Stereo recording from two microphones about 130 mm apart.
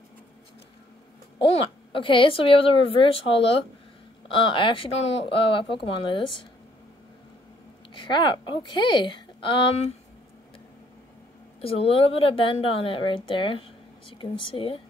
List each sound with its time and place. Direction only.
1.5 s a woman's voice: 45° left (ahead or behind)
7.9 s speech: 35° left (ahead or behind)
11.6 s a woman's voice: 50° left (ahead or behind)